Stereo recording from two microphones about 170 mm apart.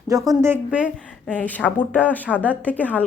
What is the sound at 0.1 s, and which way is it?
Speech, 15° right (ahead or behind).